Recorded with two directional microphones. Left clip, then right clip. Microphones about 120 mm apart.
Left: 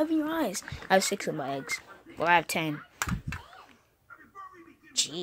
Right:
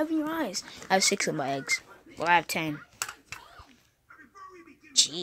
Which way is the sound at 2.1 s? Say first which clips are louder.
Even; 5° left (ahead or behind).